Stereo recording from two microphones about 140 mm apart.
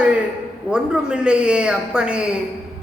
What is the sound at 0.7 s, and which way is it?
Speech, 5° right (ahead or behind).